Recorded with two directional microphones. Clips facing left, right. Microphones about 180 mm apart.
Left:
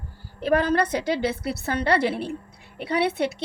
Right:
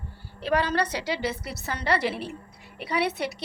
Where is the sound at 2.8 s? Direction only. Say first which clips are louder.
Left 4 dB; 55° left (ahead or behind).